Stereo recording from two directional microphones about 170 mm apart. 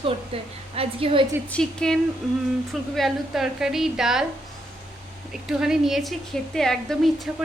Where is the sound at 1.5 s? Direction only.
5° left (ahead or behind).